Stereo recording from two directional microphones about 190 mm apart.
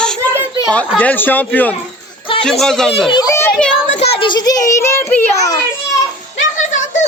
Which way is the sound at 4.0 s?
30° left (ahead or behind).